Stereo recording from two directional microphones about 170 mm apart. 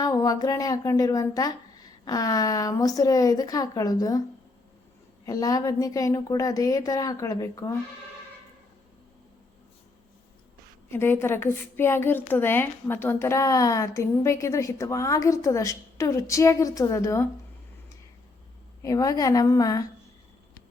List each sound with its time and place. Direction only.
0.0 s speech: 20° left (ahead or behind)
5.2 s speech: 20° left (ahead or behind)
10.9 s a woman's voice: 15° left (ahead or behind)
18.8 s speech: 20° left (ahead or behind)